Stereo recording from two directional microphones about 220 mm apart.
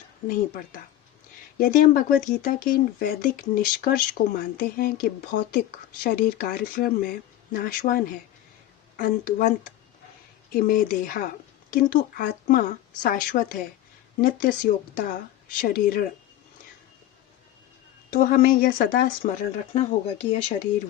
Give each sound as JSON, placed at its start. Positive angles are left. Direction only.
{"t": 0.3, "sound": "speech", "side_deg": 40}
{"t": 18.1, "sound": "speech", "side_deg": 40}
{"t": 19.7, "sound": "speech", "side_deg": 30}